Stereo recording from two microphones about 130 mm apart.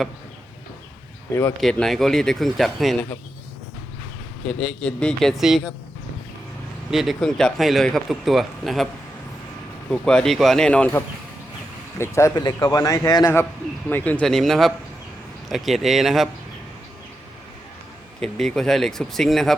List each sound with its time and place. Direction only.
1.3 s speech: 15° left (ahead or behind)
1.6 s speech: centre (ahead or behind)
4.4 s speech: 5° left (ahead or behind)
6.9 s speech: centre (ahead or behind)
9.9 s speech: 5° left (ahead or behind)
11.9 s a man's voice: 20° left (ahead or behind); by 16.3 s centre (ahead or behind)
18.2 s speech: 5° left (ahead or behind)